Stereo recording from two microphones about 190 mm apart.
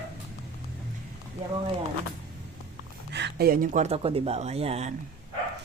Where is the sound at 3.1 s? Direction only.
60° right (ahead or behind).